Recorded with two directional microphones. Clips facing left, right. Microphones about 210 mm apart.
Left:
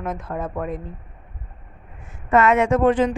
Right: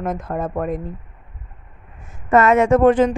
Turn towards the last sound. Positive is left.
turn(degrees=-45)  # may be behind; listen again after turning